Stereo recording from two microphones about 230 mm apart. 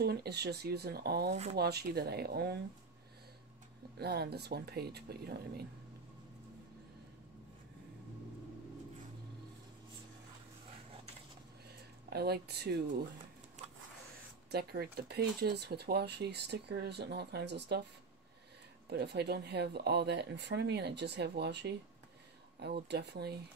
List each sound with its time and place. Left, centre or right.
0.0 s speech: right
1.3 s speech: right
1.6 s speech: right
4.0 s speech: right
12.1 s speech: right
14.5 s speech: right
18.9 s speech: right